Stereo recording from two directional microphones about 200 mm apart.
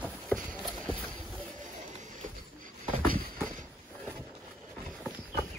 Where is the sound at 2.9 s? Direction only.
45° right (ahead or behind).